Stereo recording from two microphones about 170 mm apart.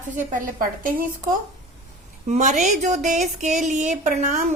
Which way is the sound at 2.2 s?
45° right (ahead or behind).